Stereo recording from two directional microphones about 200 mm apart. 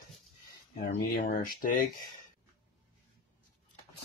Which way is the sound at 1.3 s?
45° left (ahead or behind).